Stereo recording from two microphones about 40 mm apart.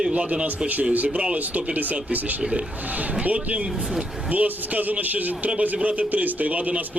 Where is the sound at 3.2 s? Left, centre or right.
Right.